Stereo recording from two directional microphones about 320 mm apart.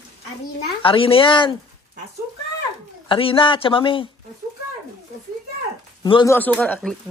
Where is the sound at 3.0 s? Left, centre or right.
Centre.